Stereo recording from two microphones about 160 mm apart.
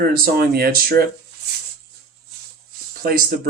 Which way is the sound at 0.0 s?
65° right (ahead or behind).